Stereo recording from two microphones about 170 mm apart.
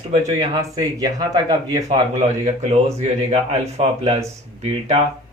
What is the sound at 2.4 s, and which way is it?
A man's voice, 40° right (ahead or behind).